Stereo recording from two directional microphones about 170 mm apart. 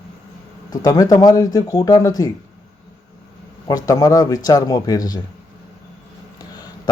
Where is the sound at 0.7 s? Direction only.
20° left (ahead or behind).